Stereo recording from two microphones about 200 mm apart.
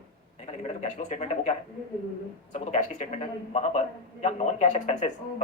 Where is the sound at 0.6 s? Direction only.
35° left (ahead or behind).